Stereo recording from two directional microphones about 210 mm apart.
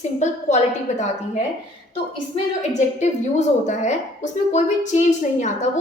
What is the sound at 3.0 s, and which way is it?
A woman's voice, 35° left (ahead or behind).